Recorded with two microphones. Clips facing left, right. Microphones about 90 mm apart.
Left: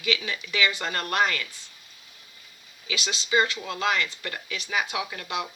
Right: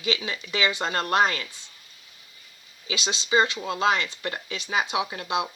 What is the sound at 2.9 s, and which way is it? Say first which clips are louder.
Speech: right 2 dB; 25° right (ahead or behind).